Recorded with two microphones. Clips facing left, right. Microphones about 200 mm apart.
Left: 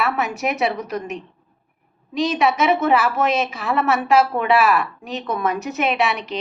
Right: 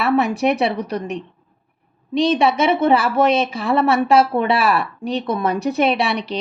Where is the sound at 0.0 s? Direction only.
30° right (ahead or behind).